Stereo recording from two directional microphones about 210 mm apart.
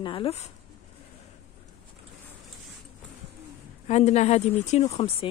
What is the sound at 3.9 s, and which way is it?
Speech, 35° left (ahead or behind).